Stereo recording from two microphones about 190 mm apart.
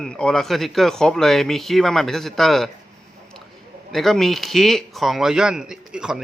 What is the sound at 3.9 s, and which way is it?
Speech, centre (ahead or behind).